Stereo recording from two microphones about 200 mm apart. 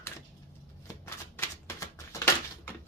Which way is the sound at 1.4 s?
15° left (ahead or behind).